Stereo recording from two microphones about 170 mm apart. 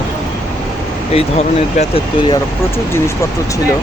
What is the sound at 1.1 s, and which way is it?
Speech, 40° left (ahead or behind).